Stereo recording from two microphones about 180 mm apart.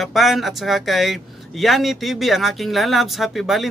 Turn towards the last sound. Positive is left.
turn(degrees=0)  # may be behind; listen again after turning